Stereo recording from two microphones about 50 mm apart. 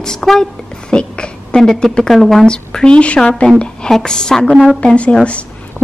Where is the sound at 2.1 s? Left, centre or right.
Centre.